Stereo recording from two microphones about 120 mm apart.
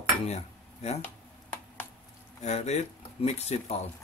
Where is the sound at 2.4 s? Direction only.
70° left (ahead or behind).